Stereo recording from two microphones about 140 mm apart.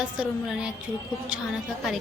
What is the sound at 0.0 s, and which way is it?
A woman's voice, 5° right (ahead or behind).